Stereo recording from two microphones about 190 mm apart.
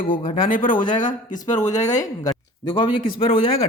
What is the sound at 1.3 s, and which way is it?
Speech, 20° left (ahead or behind).